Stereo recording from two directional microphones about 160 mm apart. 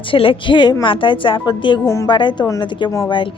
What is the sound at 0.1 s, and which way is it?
A woman's voice, 35° left (ahead or behind).